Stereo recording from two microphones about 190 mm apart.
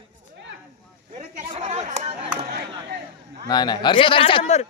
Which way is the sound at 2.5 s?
60° right (ahead or behind).